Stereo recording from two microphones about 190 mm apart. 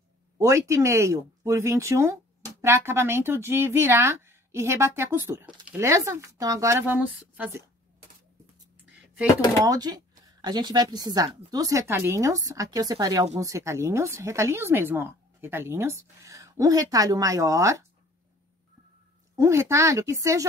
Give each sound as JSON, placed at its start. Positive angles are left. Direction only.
{"t": 0.4, "sound": "speech", "side_deg": -15}
{"t": 9.7, "sound": "speech", "side_deg": -20}
{"t": 19.3, "sound": "speech", "side_deg": -15}